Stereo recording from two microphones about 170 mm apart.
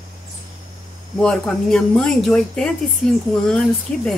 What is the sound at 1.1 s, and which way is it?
Speech, 5° left (ahead or behind).